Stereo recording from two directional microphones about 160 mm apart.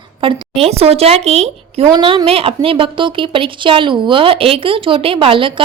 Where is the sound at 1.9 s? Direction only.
30° right (ahead or behind).